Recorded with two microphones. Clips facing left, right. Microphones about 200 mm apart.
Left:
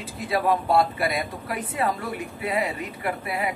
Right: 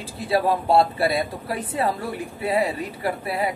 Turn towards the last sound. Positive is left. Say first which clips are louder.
# right 3 dB
turn(degrees=-30)  # may be behind; listen again after turning